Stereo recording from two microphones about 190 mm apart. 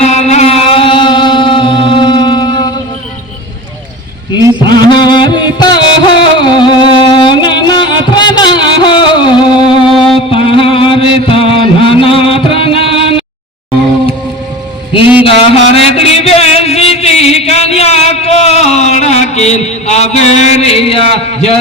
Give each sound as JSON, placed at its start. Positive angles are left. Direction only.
{"t": 0.0, "sound": "music", "side_deg": 35}
{"t": 4.9, "sound": "music", "side_deg": 25}
{"t": 15.2, "sound": "a sound", "side_deg": 30}
{"t": 16.0, "sound": "music", "side_deg": 30}